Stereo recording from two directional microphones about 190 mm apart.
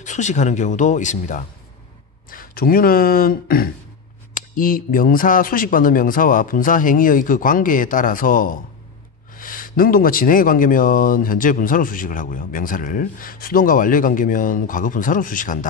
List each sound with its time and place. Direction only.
0.0 s speech: 40° left (ahead or behind)